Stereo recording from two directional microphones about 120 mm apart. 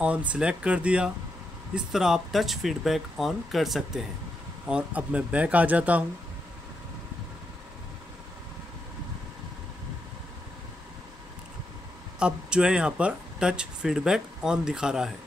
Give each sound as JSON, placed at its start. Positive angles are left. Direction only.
{"t": 0.0, "sound": "speech", "side_deg": -10}
{"t": 12.2, "sound": "speech", "side_deg": -10}